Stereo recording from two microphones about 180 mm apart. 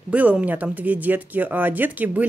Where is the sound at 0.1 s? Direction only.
5° right (ahead or behind).